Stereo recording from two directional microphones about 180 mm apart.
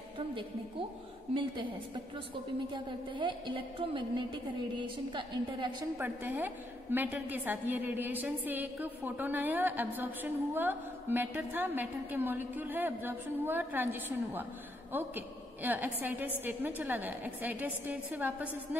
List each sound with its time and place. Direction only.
0.3 s a woman's voice: 30° right (ahead or behind)
2.7 s a woman's voice: 25° right (ahead or behind)
5.9 s a woman's voice: 10° right (ahead or behind)